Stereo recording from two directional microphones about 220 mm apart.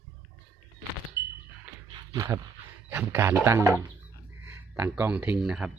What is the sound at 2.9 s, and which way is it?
Speech, 10° right (ahead or behind).